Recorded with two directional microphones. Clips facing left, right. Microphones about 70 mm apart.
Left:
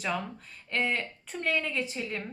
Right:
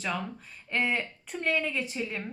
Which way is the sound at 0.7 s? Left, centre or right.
Centre.